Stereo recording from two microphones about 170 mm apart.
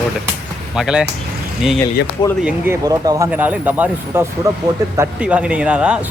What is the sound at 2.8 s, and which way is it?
Speech, 20° right (ahead or behind).